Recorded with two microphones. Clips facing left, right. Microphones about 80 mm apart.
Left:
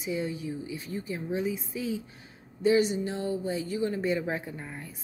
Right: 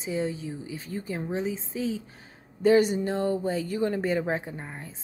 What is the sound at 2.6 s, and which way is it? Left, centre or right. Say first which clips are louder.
A woman's voice: right 3 dB; right.